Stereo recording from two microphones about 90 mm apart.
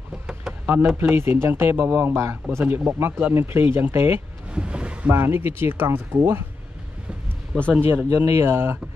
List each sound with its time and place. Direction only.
0.3 s a sound: 5° right (ahead or behind)
0.9 s speech: 25° right (ahead or behind)
4.5 s boat: 10° right (ahead or behind)
5.1 s speech: 25° right (ahead or behind)
7.5 s speech: 10° left (ahead or behind)
7.9 s speech: 25° right (ahead or behind)